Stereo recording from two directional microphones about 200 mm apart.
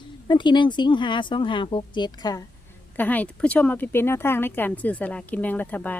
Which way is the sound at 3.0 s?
10° left (ahead or behind).